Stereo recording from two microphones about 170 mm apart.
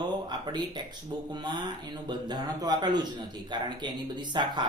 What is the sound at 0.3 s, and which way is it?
Speech, 25° right (ahead or behind).